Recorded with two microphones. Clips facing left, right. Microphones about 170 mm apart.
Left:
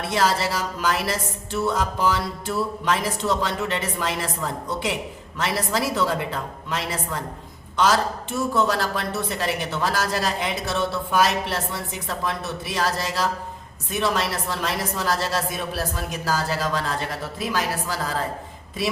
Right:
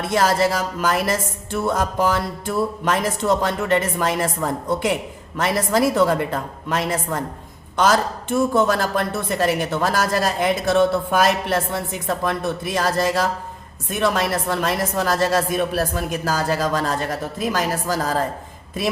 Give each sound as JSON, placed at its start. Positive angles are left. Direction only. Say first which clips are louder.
{"t": 0.1, "sound": "a woman's voice", "louder": "right 4 dB", "side_deg": -45}